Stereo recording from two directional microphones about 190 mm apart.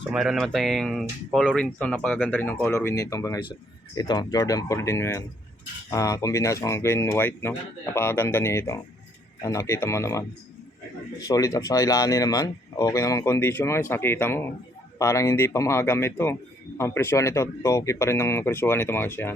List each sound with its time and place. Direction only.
0.1 s speech: centre (ahead or behind); by 10.2 s 15° left (ahead or behind)
11.3 s speech: 20° left (ahead or behind)